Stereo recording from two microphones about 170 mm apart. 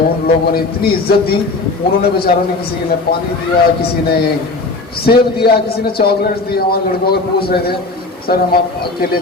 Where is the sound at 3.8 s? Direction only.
65° left (ahead or behind).